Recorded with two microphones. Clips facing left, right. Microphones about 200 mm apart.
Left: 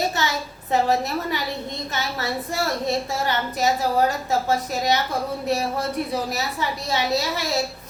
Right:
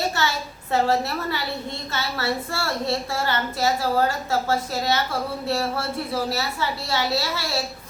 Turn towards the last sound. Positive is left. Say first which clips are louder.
# left 2 dB
turn(degrees=20)  # may be behind; listen again after turning